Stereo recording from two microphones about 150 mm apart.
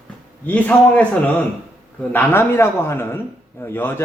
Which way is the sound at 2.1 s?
15° left (ahead or behind).